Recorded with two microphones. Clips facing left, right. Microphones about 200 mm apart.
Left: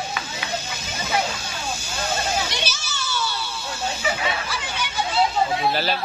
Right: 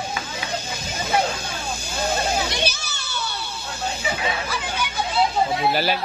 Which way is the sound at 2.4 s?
60° right (ahead or behind).